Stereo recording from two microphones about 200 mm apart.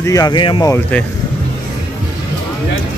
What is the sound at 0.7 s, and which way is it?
Speech, 5° left (ahead or behind).